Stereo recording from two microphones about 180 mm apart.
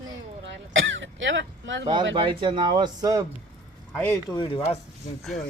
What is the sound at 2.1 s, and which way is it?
Speech, 30° right (ahead or behind).